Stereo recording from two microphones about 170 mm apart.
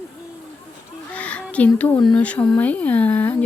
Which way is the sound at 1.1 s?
10° left (ahead or behind).